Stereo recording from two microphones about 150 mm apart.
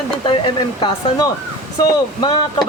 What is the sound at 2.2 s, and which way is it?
Speech, 30° left (ahead or behind).